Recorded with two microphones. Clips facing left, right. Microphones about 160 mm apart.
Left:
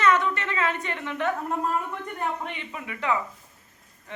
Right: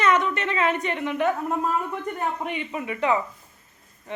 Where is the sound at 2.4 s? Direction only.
20° right (ahead or behind).